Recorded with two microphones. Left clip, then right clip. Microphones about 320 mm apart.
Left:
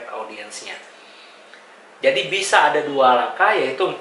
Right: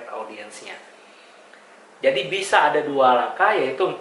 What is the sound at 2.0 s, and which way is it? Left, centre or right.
Speech, centre.